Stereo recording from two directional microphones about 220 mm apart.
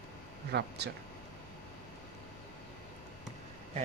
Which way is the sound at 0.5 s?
50° right (ahead or behind).